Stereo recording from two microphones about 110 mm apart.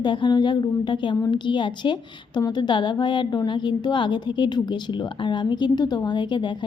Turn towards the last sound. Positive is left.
turn(degrees=45)  # may be behind; listen again after turning